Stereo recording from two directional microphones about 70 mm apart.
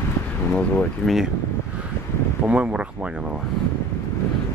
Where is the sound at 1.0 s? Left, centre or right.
Centre.